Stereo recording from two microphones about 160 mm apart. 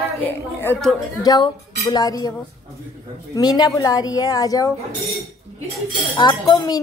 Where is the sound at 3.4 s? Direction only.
25° left (ahead or behind).